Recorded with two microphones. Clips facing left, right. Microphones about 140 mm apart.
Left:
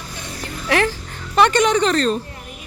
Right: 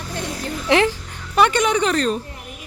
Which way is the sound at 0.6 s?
20° right (ahead or behind).